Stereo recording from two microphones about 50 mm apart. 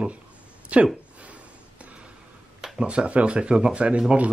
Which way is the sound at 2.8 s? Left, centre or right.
Right.